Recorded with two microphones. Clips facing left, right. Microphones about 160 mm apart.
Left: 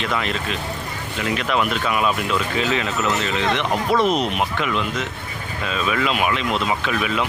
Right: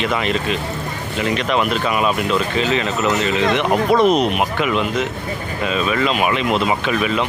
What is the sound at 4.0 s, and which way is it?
Speech, 15° right (ahead or behind).